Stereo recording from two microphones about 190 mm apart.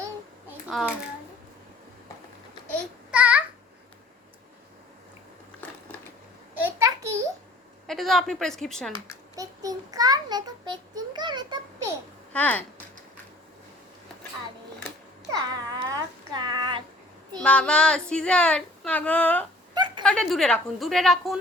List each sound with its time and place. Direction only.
0.7 s speech: centre (ahead or behind)
3.1 s a sound: 5° right (ahead or behind)
5.6 s crushing: 10° left (ahead or behind)
6.6 s a sound: 15° right (ahead or behind)
7.9 s a woman's voice: centre (ahead or behind)
9.3 s a child's voice: 20° right (ahead or behind)
12.3 s speech: 5° left (ahead or behind)
15.3 s babbling: 20° right (ahead or behind)
17.4 s speech: 5° left (ahead or behind)